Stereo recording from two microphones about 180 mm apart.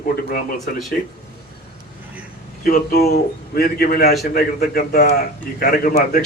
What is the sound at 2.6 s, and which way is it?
A man's voice, 55° left (ahead or behind).